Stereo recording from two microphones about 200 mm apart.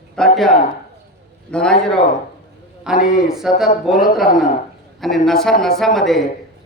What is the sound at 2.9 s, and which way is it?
Speech, 40° left (ahead or behind).